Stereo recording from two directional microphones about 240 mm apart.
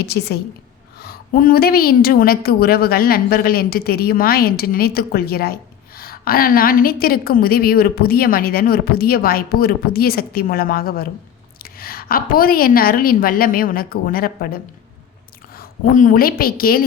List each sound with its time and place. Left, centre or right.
0.0 s a woman's voice: left